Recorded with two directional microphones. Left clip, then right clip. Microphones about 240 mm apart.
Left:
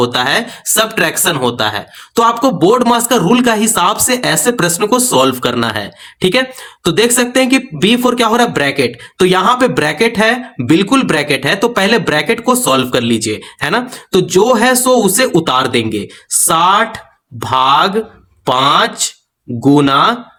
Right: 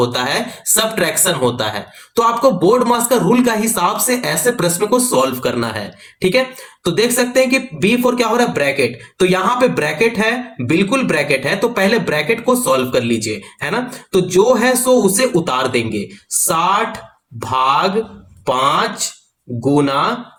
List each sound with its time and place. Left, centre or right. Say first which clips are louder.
0.0 s speech: left 4 dB; left
17.4 s speech: left 4 dB; left